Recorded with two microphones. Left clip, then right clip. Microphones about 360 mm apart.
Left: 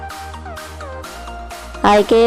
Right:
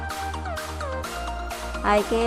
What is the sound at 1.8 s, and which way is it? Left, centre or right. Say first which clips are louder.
Speech: left 10 dB; left.